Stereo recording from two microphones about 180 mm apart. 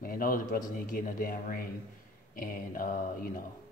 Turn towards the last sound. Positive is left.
turn(degrees=50)  # may be behind; listen again after turning